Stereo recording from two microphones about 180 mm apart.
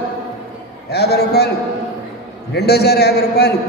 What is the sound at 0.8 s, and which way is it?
Speech, 65° left (ahead or behind).